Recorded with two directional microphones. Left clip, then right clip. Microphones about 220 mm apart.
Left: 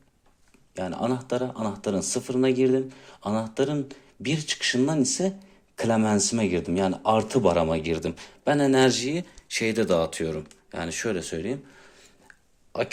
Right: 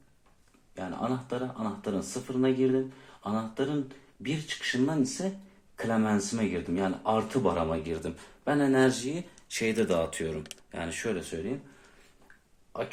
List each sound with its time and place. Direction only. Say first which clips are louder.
0.7 s speech: left 5 dB; 40° left (ahead or behind)